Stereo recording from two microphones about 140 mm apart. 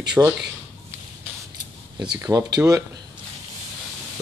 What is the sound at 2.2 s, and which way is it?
Speech, 25° right (ahead or behind).